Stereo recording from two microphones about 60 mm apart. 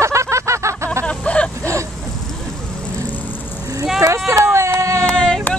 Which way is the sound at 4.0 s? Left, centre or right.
Right.